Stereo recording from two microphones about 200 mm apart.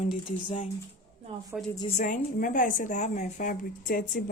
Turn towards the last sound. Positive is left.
turn(degrees=45)  # may be behind; listen again after turning